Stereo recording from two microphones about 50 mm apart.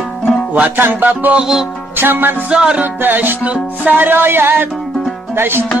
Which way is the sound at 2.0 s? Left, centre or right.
Right.